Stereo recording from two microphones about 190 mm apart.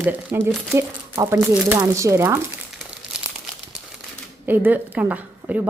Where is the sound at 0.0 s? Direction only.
10° right (ahead or behind).